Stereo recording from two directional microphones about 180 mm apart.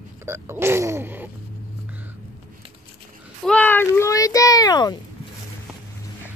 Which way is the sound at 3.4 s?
10° left (ahead or behind).